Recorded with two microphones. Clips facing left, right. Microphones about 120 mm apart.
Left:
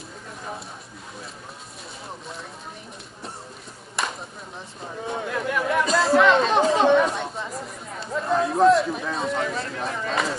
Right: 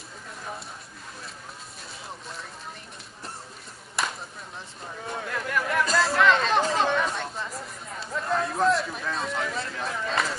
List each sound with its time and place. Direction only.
4.0 s chop: centre (ahead or behind)
5.0 s chatter: centre (ahead or behind)